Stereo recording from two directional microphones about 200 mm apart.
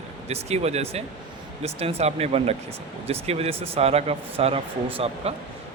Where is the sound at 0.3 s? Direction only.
30° right (ahead or behind).